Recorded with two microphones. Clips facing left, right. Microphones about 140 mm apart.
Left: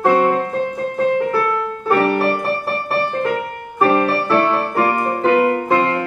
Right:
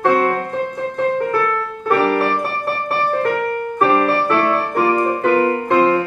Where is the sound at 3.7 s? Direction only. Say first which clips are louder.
Left 1 dB; 5° left (ahead or behind).